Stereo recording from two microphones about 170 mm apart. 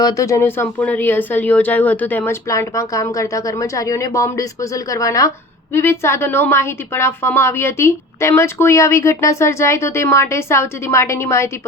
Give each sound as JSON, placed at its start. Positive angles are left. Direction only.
{"t": 0.0, "sound": "a woman's voice", "side_deg": 20}